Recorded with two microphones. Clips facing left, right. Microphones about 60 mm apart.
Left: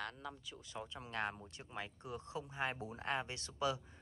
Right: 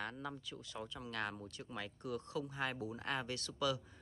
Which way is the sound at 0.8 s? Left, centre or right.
Left.